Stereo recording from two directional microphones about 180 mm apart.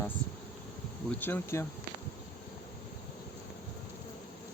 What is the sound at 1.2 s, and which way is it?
Speech, 15° left (ahead or behind).